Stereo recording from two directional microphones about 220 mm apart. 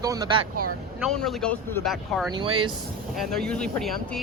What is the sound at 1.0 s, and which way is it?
Speech, centre (ahead or behind).